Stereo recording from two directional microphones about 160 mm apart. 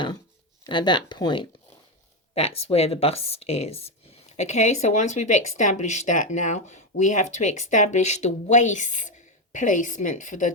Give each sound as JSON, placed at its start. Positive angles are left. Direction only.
{"t": 0.6, "sound": "speech", "side_deg": 30}